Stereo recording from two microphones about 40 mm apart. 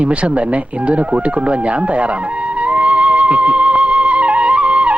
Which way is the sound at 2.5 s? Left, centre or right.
Right.